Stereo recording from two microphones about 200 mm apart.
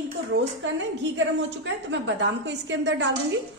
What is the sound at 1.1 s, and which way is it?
A woman's voice, 60° right (ahead or behind).